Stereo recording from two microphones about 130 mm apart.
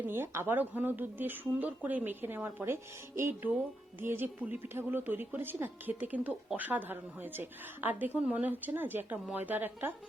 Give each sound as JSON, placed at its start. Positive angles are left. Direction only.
{"t": 0.1, "sound": "speech", "side_deg": -15}